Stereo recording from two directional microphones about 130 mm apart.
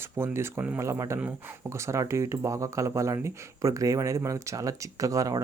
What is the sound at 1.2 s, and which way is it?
Speech, 10° right (ahead or behind).